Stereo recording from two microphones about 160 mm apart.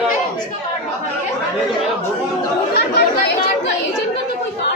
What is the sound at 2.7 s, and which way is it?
Chatter, 90° left.